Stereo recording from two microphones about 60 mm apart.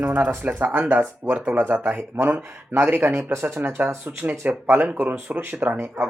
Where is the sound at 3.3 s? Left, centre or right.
Right.